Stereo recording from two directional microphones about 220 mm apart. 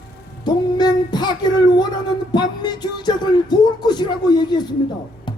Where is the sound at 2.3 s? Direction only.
20° left (ahead or behind).